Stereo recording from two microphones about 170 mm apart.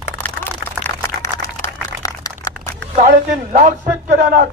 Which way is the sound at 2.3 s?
20° left (ahead or behind).